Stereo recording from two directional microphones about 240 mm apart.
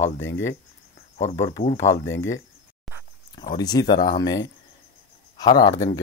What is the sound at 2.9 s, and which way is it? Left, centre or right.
Pig, centre.